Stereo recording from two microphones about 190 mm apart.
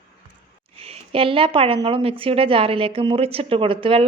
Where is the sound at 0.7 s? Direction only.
30° right (ahead or behind).